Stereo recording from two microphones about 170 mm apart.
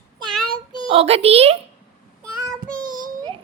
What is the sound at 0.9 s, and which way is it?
Speech, 35° right (ahead or behind).